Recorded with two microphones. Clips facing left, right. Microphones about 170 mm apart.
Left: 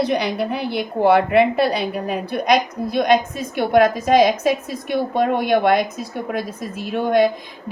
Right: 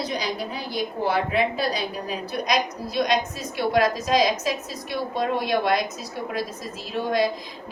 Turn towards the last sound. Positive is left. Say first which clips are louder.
# left 6 dB
turn(degrees=55)  # may be behind; listen again after turning